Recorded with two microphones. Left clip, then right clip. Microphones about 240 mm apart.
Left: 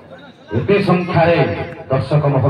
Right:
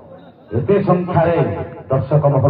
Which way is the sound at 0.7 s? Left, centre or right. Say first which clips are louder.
Even; left.